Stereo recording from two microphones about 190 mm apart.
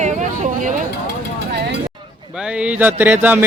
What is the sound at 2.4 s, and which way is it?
Speech, 5° right (ahead or behind).